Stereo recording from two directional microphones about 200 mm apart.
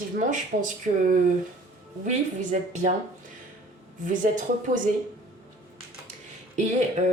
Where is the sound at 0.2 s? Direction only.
40° right (ahead or behind).